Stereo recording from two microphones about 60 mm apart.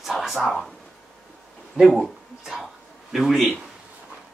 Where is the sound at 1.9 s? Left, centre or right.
Centre.